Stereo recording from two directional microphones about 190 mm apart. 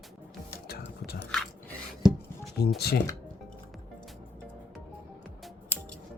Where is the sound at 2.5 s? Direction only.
55° left (ahead or behind).